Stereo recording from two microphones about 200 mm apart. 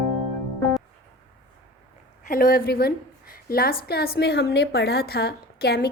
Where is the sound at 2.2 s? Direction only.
45° left (ahead or behind).